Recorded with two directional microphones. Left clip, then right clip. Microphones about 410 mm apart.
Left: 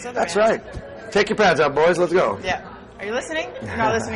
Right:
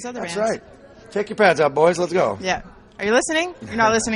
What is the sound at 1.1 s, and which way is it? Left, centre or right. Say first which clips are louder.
Speech: left 6 dB; centre.